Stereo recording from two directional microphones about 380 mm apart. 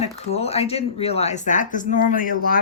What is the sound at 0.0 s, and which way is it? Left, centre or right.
Speech, centre.